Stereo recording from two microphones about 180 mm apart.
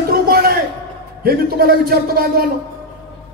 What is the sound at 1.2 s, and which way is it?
A man's voice, 55° right (ahead or behind).